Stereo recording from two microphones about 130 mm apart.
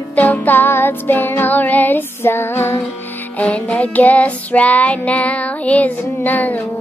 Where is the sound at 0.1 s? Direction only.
10° left (ahead or behind).